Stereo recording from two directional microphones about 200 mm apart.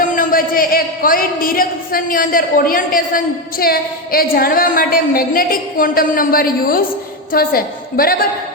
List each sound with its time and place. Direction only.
0.0 s a man's voice: 40° left (ahead or behind)